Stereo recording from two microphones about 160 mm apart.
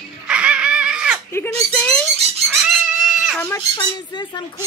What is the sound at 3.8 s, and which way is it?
Speech, 25° left (ahead or behind).